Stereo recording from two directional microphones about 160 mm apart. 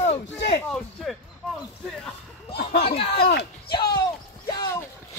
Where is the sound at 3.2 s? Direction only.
90° left.